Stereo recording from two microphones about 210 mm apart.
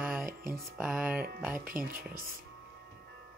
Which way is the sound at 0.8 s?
5° right (ahead or behind).